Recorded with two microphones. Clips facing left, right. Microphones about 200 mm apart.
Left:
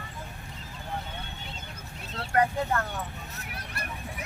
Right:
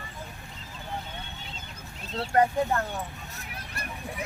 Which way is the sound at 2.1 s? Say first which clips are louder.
Right 2 dB; 30° right (ahead or behind).